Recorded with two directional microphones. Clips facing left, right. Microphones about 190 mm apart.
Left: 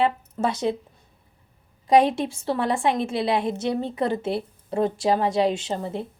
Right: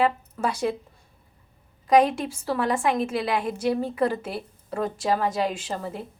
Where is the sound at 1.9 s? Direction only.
25° left (ahead or behind).